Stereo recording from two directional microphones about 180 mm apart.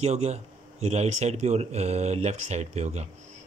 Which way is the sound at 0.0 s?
40° right (ahead or behind).